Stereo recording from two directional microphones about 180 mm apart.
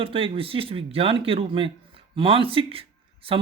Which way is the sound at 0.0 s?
30° right (ahead or behind).